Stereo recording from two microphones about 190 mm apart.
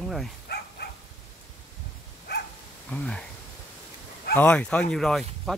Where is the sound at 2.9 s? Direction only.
5° left (ahead or behind).